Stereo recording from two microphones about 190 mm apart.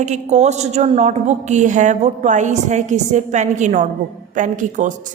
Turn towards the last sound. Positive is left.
turn(degrees=-40)  # may be behind; listen again after turning